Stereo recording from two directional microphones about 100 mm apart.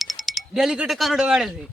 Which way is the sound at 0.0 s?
Centre (ahead or behind).